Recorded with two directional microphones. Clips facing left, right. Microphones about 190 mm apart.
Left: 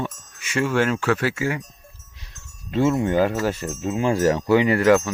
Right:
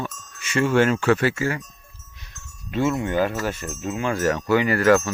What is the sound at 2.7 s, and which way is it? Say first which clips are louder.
Speech: left 3 dB; 25° left (ahead or behind).